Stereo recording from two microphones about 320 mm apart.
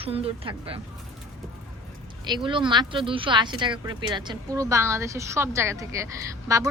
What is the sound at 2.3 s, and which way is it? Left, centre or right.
Speech, centre.